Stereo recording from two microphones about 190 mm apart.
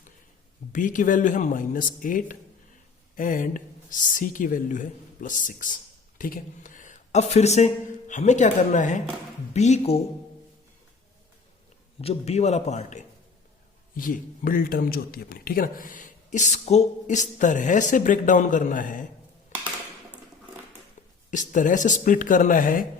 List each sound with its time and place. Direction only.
0.7 s a man's voice: 45° left (ahead or behind)
11.9 s a man's voice: 35° left (ahead or behind)
19.5 s a sound: 40° left (ahead or behind)
21.2 s speech: 40° left (ahead or behind)